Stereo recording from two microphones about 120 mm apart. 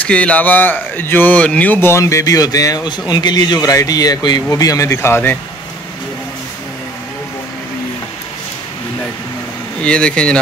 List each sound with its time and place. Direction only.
0.0 s speech: 10° left (ahead or behind)
9.8 s speech: 10° left (ahead or behind)